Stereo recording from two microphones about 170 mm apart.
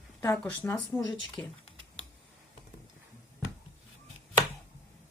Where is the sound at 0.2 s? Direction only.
15° left (ahead or behind).